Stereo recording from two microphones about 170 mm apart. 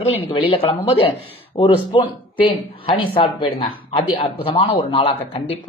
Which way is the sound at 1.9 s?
30° left (ahead or behind).